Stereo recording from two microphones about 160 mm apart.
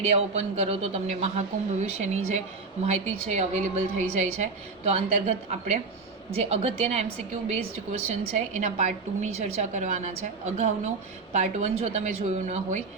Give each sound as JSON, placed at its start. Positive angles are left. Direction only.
{"t": 0.0, "sound": "a man's voice", "side_deg": -40}